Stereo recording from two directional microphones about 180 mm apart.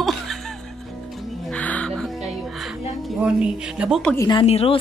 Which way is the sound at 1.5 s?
10° left (ahead or behind).